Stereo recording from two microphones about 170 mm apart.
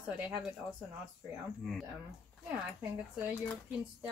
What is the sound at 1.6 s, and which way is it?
Speech, centre (ahead or behind).